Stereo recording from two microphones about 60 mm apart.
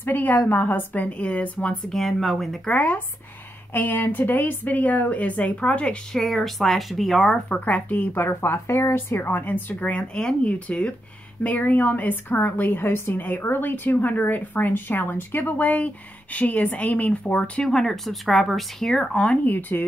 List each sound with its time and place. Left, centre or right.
0.0 s a woman's voice: left
1.9 s speech: centre
2.7 s a woman's voice: left
6.1 s speech: centre
7.4 s a woman's voice: left
8.1 s a woman's voice: left; by 17.6 s centre
17.6 s speech: centre
19.4 s speech: left